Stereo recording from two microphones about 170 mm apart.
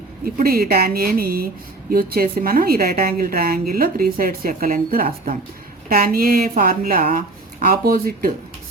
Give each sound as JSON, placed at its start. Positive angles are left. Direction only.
{"t": 0.3, "sound": "a woman's voice", "side_deg": -60}